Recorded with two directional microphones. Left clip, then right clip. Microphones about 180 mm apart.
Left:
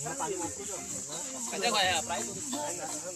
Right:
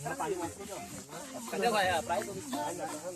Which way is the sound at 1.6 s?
45° right (ahead or behind).